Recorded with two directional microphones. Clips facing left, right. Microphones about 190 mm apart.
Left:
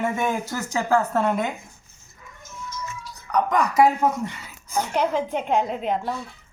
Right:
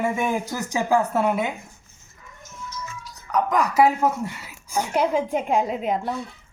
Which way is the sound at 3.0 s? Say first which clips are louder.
Even; 5° right (ahead or behind).